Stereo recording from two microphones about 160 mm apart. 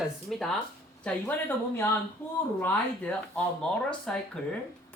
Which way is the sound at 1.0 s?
15° left (ahead or behind).